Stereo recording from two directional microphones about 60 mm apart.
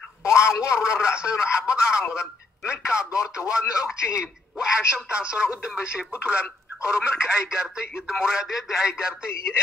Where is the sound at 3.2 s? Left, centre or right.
Centre.